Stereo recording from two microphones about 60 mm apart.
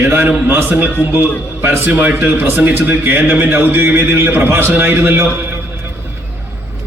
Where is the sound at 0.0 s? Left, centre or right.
Right.